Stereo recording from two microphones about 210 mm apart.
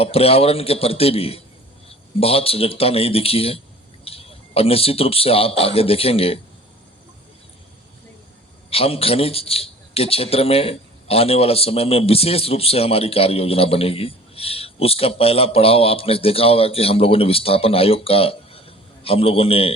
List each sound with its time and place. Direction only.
0.0 s a man's voice: 30° left (ahead or behind)
8.7 s a man's voice: 25° left (ahead or behind)